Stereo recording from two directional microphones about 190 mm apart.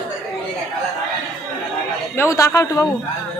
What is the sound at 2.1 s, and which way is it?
Speech, 15° left (ahead or behind).